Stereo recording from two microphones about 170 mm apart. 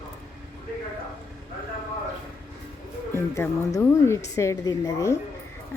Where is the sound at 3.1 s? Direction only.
15° left (ahead or behind).